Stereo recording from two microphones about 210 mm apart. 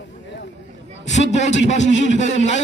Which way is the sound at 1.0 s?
35° left (ahead or behind).